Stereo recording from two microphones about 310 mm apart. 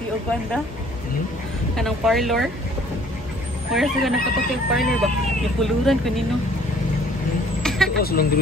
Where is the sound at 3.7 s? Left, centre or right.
Centre.